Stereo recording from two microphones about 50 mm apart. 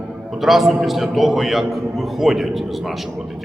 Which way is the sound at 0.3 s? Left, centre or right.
Centre.